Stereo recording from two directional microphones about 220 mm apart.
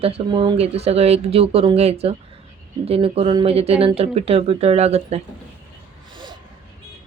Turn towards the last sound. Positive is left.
turn(degrees=-30)  # may be behind; listen again after turning